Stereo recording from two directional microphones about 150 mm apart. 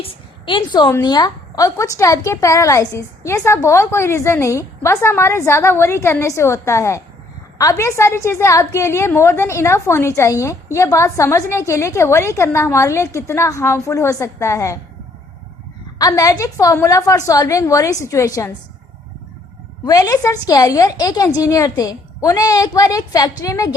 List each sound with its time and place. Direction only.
0.0 s a woman's voice: 35° left (ahead or behind)
16.0 s a woman's voice: 25° left (ahead or behind)
19.8 s a woman's voice: 25° left (ahead or behind)